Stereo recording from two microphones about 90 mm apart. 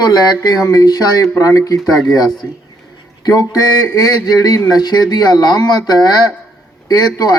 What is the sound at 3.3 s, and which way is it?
Speech, 40° left (ahead or behind).